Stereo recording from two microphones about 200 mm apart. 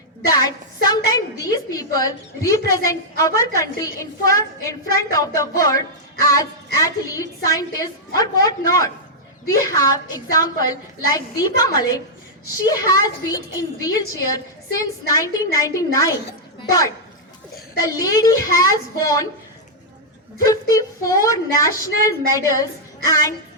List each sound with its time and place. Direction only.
0.3 s a woman's voice: 20° left (ahead or behind)
20.4 s a woman's voice: 15° left (ahead or behind)